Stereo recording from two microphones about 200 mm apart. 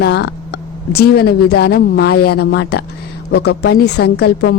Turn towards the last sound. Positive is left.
turn(degrees=55)  # may be behind; listen again after turning